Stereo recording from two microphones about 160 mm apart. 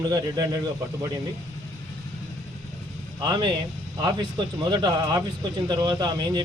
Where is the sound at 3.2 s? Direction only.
25° right (ahead or behind).